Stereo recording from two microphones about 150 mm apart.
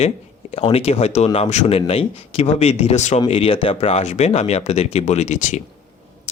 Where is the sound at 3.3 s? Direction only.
40° left (ahead or behind).